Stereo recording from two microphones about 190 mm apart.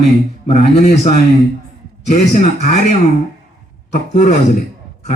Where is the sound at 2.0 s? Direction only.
40° left (ahead or behind).